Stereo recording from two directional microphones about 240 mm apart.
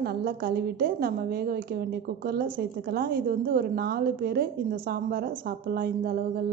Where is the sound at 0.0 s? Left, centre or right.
Right.